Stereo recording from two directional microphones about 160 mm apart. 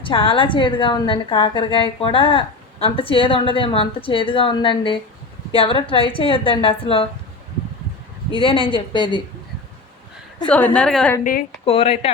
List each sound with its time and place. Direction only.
0.0 s a woman's voice: 35° left (ahead or behind)
8.3 s a woman's voice: 35° left (ahead or behind)
10.8 s a woman's voice: 5° left (ahead or behind)
11.2 s a woman's voice: 60° left (ahead or behind)
11.6 s a woman's voice: 35° left (ahead or behind)